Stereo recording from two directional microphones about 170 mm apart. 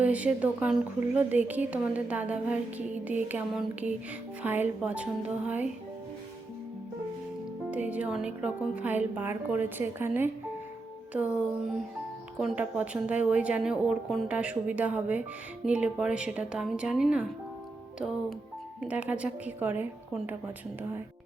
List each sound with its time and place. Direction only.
0.0 s a woman's voice: 10° right (ahead or behind)
7.7 s a woman's voice: 10° right (ahead or behind)
18.8 s a woman's voice: 10° right (ahead or behind)